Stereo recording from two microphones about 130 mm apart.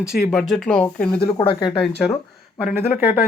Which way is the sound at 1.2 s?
40° left (ahead or behind).